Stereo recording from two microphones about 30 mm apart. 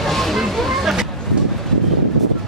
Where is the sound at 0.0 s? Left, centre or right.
Centre.